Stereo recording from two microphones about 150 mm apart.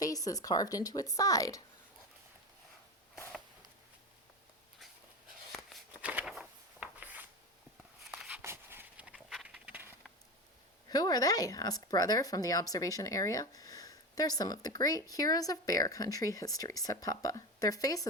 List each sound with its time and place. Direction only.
0.0 s speech: 25° left (ahead or behind)
5.5 s a sound: centre (ahead or behind)
8.4 s dog: 15° right (ahead or behind)
10.8 s speech: 25° left (ahead or behind)